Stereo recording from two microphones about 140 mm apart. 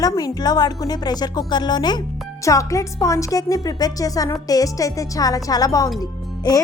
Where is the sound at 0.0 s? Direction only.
25° left (ahead or behind).